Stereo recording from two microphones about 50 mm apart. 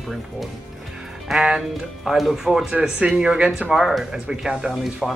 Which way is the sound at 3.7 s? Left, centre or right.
Centre.